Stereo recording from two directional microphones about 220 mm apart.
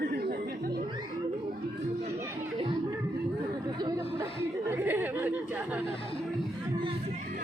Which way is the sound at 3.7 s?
20° right (ahead or behind).